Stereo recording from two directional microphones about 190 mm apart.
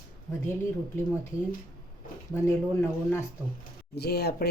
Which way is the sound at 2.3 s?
10° left (ahead or behind).